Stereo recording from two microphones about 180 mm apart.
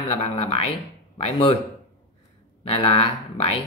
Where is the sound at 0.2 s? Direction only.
35° left (ahead or behind).